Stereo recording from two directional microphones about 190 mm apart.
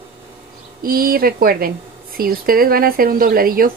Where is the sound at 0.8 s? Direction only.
50° right (ahead or behind).